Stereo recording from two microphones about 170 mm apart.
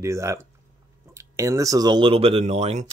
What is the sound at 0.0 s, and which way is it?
Speech, 15° right (ahead or behind).